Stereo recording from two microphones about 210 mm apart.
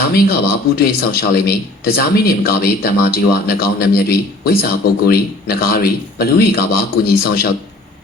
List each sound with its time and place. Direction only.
0.0 s speech: 45° left (ahead or behind)